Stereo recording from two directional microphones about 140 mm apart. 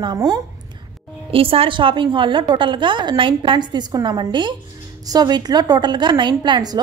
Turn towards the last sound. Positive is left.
turn(degrees=-30)  # may be behind; listen again after turning